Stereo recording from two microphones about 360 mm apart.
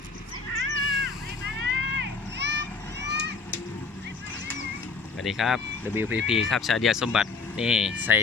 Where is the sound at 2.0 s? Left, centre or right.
Right.